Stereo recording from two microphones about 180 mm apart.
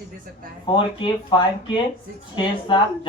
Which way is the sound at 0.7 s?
25° left (ahead or behind).